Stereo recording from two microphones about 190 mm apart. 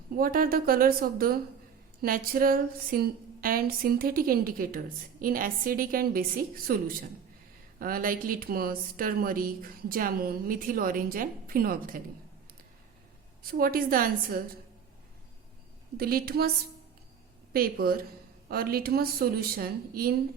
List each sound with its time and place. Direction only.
0.2 s speech: 50° right (ahead or behind)
13.4 s speech: 50° right (ahead or behind)
16.0 s speech: 50° right (ahead or behind)
17.5 s speech: 50° right (ahead or behind)